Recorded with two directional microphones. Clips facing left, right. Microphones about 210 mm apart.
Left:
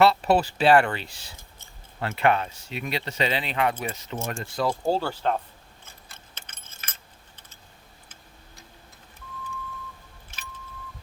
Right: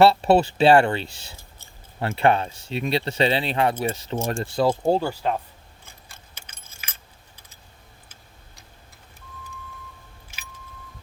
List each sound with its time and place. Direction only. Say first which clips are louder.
0.0 s speech: right 4 dB; 30° right (ahead or behind); by 5.4 s 10° right (ahead or behind)
5.8 s keys jangling: right 1 dB; 10° right (ahead or behind)
10.3 s keys jangling: left 3 dB; 10° right (ahead or behind)